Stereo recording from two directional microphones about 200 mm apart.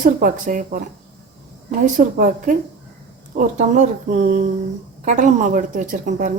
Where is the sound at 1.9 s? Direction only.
45° right (ahead or behind).